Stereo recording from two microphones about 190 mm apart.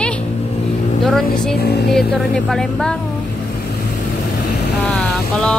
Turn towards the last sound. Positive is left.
turn(degrees=5)  # may be behind; listen again after turning